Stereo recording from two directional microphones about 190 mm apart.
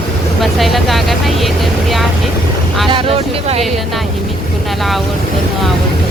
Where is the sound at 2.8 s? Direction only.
30° right (ahead or behind).